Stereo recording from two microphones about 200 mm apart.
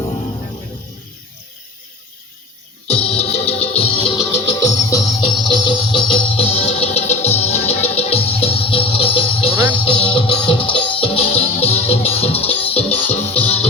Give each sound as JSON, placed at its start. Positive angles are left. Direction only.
{"t": 2.8, "sound": "music", "side_deg": 30}